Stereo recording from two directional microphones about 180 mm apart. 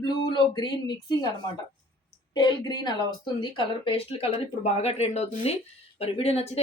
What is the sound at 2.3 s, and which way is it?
Speech, 25° left (ahead or behind).